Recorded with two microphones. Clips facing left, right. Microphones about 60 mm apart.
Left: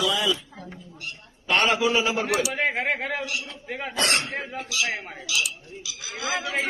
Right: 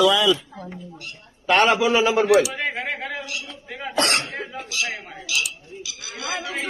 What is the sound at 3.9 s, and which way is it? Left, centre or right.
Speech, right.